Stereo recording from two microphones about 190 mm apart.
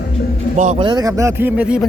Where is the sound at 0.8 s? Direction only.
20° right (ahead or behind).